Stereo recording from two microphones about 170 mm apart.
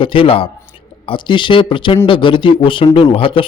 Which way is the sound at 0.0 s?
30° left (ahead or behind).